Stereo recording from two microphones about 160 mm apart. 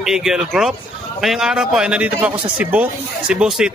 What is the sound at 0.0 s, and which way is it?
A man's voice, 5° right (ahead or behind).